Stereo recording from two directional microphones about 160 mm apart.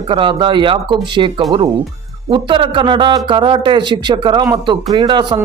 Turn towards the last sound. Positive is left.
turn(degrees=-30)  # may be behind; listen again after turning